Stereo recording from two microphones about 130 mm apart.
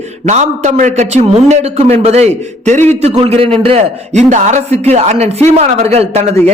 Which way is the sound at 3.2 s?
45° right (ahead or behind).